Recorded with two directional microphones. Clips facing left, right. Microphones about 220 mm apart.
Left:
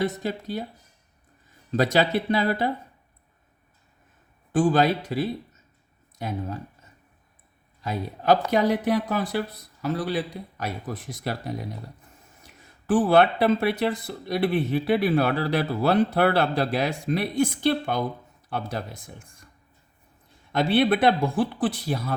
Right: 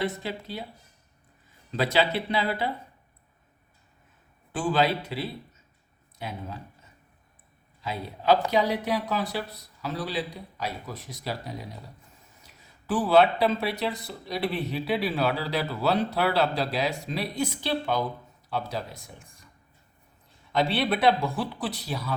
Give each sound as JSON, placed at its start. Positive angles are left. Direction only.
{"t": 0.0, "sound": "speech", "side_deg": 45}
{"t": 1.7, "sound": "speech", "side_deg": 45}
{"t": 4.5, "sound": "speech", "side_deg": 45}
{"t": 7.9, "sound": "speech", "side_deg": 50}
{"t": 20.6, "sound": "speech", "side_deg": 55}